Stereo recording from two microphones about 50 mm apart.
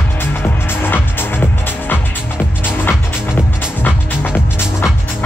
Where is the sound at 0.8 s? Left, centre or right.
Left.